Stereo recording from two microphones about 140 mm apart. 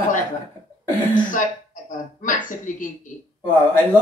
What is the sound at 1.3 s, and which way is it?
Speech, 70° left (ahead or behind).